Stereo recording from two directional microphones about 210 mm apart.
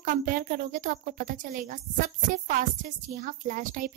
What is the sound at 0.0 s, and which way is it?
A woman's voice, 40° right (ahead or behind).